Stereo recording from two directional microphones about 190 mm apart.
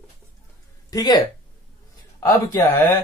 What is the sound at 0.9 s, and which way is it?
Speech, 20° left (ahead or behind).